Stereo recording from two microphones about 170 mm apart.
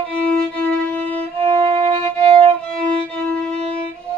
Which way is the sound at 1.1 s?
35° right (ahead or behind).